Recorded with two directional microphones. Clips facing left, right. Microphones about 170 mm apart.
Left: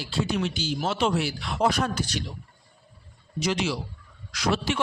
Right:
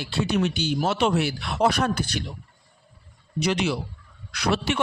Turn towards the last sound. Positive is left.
turn(degrees=-65)  # may be behind; listen again after turning